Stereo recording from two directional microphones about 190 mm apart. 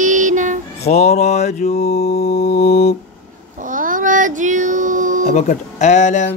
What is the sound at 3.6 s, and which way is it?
Child singing, 45° right (ahead or behind).